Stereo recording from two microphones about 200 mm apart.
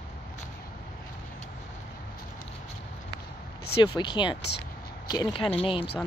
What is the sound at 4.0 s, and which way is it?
Speech, 25° left (ahead or behind).